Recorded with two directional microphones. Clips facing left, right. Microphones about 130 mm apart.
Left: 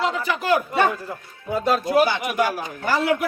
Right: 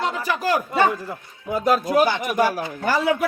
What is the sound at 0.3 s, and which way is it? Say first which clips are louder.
Speech: even; 40° right (ahead or behind).